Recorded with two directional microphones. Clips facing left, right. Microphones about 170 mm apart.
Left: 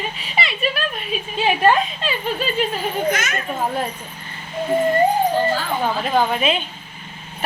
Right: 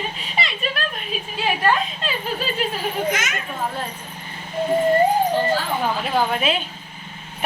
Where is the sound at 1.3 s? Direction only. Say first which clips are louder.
Left 4 dB; 20° left (ahead or behind).